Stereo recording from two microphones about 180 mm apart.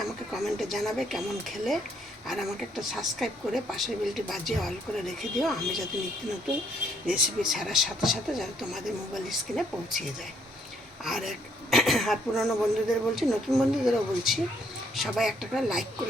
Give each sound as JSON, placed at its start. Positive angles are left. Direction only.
{"t": 0.0, "sound": "speech", "side_deg": 0}
{"t": 7.1, "sound": "speech", "side_deg": 0}
{"t": 11.0, "sound": "speech", "side_deg": 0}